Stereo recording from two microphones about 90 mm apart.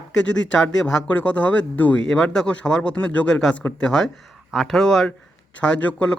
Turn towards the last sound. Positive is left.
turn(degrees=10)  # may be behind; listen again after turning